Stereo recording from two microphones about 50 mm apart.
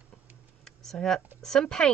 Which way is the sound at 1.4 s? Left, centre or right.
Centre.